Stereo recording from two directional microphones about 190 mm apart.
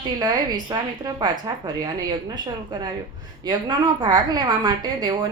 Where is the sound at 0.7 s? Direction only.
20° right (ahead or behind).